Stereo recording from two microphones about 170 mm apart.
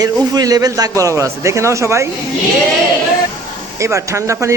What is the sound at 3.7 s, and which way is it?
Speech, 15° right (ahead or behind).